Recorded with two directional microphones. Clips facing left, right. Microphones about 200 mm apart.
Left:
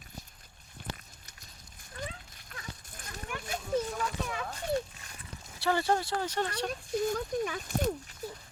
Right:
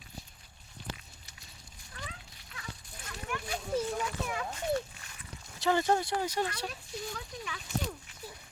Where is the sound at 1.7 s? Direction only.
50° left (ahead or behind).